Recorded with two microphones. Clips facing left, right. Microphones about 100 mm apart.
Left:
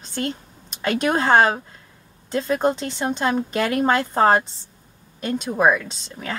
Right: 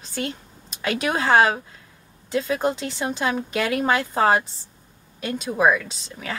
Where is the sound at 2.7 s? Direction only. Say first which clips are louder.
Left 2 dB; centre (ahead or behind).